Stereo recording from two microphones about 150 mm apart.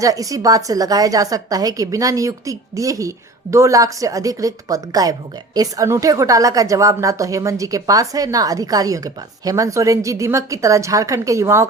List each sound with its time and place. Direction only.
0.0 s a woman's voice: 25° right (ahead or behind)